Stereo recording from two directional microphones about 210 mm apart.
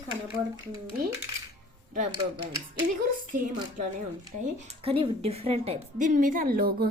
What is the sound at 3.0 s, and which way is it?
A woman's voice, 40° right (ahead or behind).